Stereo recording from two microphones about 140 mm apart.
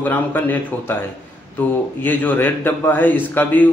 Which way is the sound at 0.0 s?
10° left (ahead or behind).